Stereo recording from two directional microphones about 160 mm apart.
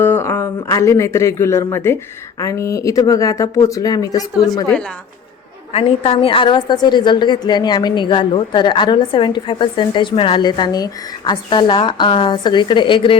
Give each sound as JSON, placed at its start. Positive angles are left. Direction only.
{"t": 0.0, "sound": "a woman's voice", "side_deg": 15}
{"t": 5.7, "sound": "a woman's voice", "side_deg": 35}